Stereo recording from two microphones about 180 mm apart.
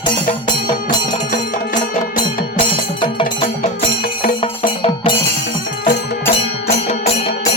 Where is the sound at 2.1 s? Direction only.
25° left (ahead or behind).